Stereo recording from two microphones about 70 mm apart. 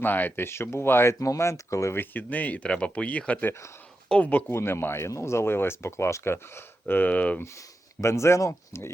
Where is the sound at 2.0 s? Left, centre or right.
Left.